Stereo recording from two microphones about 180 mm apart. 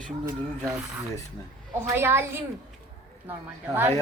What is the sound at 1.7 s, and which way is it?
Speech, 15° right (ahead or behind).